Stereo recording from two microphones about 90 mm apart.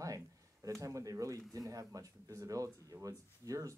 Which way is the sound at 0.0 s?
40° right (ahead or behind).